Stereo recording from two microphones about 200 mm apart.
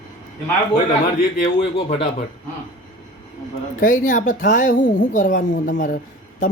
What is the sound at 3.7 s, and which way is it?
A woman's voice, 40° left (ahead or behind).